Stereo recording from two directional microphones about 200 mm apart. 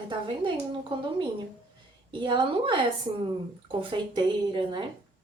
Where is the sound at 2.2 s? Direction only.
25° right (ahead or behind).